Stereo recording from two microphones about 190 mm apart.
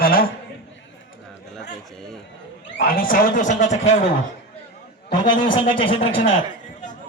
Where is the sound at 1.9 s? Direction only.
Centre (ahead or behind).